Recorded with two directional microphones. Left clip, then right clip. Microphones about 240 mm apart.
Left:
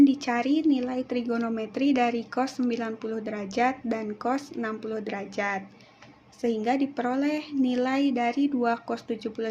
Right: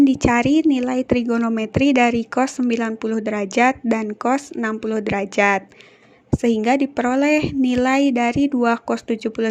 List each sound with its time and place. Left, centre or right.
0.0 s a woman's voice: right